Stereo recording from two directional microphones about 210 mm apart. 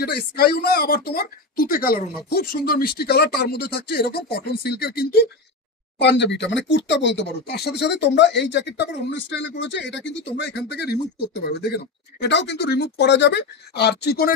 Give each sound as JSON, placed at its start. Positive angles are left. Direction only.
{"t": 0.0, "sound": "speech", "side_deg": 50}